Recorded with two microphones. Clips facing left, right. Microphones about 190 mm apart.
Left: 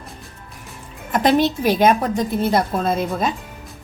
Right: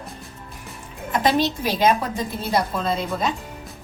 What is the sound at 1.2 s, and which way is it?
A woman's voice, 55° left (ahead or behind).